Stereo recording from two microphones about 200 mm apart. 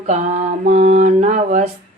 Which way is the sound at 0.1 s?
35° right (ahead or behind).